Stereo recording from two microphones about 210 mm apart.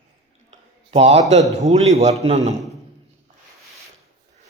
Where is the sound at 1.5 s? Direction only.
30° right (ahead or behind).